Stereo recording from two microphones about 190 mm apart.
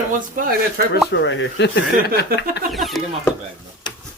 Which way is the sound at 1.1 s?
70° left (ahead or behind).